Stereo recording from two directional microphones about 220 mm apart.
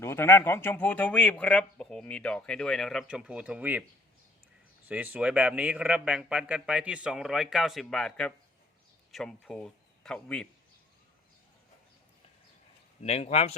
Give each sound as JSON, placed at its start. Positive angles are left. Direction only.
{"t": 0.0, "sound": "speech", "side_deg": 10}
{"t": 4.9, "sound": "speech", "side_deg": -5}
{"t": 13.0, "sound": "speech", "side_deg": 30}